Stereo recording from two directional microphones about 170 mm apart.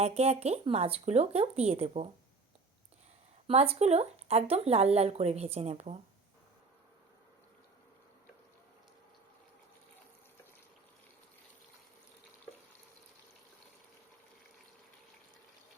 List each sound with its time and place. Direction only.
0.0 s speech: 40° right (ahead or behind)
3.4 s speech: 35° right (ahead or behind)